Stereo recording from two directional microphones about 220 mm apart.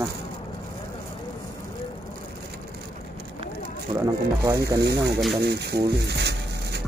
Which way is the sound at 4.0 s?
15° right (ahead or behind).